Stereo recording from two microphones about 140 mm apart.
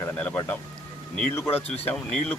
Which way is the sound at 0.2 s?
15° left (ahead or behind).